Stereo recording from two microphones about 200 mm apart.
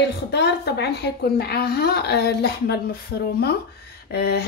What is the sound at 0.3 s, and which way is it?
A woman's voice, 55° left (ahead or behind).